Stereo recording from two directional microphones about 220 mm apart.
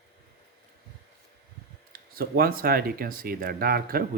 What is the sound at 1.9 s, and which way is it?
Speech, 45° right (ahead or behind).